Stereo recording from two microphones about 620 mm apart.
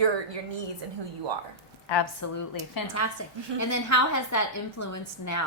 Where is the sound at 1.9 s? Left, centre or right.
Left.